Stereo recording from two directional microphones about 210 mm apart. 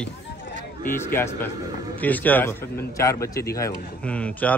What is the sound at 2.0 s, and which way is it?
A man's voice, 10° left (ahead or behind).